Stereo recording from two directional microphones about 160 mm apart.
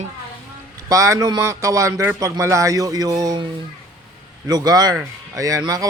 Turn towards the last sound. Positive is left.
turn(degrees=-25)  # may be behind; listen again after turning